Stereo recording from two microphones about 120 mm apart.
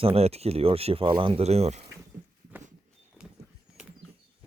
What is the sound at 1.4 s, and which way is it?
Speech, 60° right (ahead or behind).